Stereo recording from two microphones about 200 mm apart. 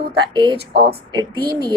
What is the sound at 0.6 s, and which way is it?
Speech, 55° right (ahead or behind).